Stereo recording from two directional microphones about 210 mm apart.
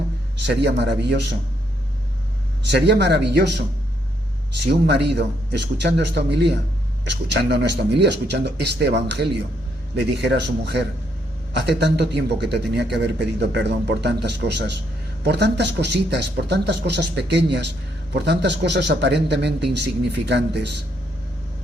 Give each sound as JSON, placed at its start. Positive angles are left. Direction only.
{"t": 0.3, "sound": "speech", "side_deg": -55}
{"t": 2.6, "sound": "a man's voice", "side_deg": -55}